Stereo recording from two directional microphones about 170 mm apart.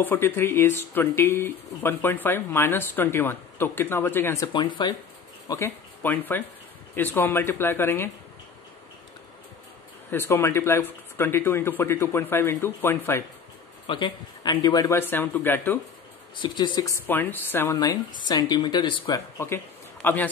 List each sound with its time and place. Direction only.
0.0 s speech: 10° left (ahead or behind)
4.5 s speech: 25° left (ahead or behind)
5.5 s speech: 15° left (ahead or behind)
10.1 s speech: 15° left (ahead or behind)
13.8 s speech: 30° left (ahead or behind); by 15.8 s 10° left (ahead or behind)
16.3 s speech: 25° left (ahead or behind)
17.1 s speech: 10° left (ahead or behind)
19.3 s a man's voice: 15° left (ahead or behind)